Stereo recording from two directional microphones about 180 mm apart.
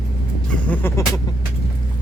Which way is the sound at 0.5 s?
10° left (ahead or behind).